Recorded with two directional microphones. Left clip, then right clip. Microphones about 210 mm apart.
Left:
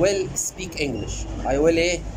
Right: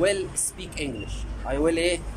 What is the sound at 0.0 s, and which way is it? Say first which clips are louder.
A man's voice: left 3 dB; 5° left (ahead or behind).